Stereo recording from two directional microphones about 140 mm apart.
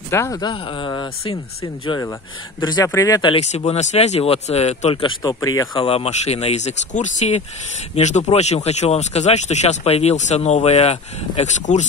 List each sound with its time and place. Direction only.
0.1 s speech: 20° left (ahead or behind)
3.3 s speech: 50° left (ahead or behind); by 5.7 s 25° left (ahead or behind)
5.8 s speech: 45° left (ahead or behind)